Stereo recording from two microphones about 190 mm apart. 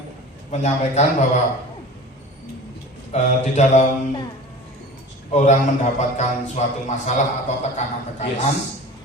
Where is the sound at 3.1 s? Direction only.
40° left (ahead or behind).